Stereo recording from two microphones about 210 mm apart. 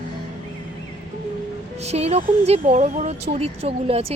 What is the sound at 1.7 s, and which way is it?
Speech, 30° right (ahead or behind).